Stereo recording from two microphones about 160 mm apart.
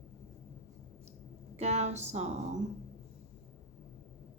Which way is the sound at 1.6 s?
40° right (ahead or behind).